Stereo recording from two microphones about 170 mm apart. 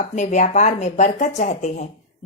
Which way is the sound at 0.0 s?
45° left (ahead or behind).